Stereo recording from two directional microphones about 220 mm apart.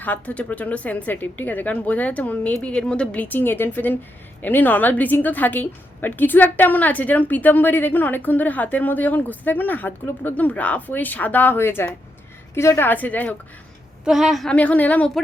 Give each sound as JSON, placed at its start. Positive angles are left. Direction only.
{"t": 0.0, "sound": "a woman's voice", "side_deg": 5}